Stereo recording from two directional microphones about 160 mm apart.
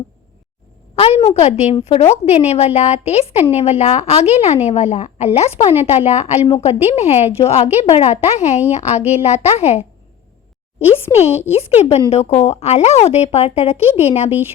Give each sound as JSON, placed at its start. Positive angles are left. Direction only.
{"t": 0.9, "sound": "a woman's voice", "side_deg": 40}